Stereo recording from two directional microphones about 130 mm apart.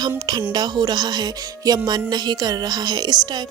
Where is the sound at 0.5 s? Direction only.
30° right (ahead or behind).